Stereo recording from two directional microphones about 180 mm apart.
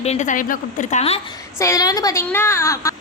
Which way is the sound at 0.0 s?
40° left (ahead or behind).